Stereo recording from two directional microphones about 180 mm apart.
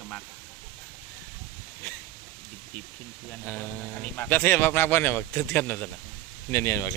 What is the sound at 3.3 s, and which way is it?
Speech, 10° left (ahead or behind).